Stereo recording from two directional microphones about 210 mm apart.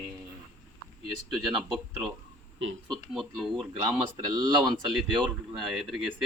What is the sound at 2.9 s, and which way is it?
Speech, centre (ahead or behind).